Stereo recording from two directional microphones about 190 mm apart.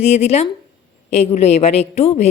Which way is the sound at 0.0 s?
35° left (ahead or behind).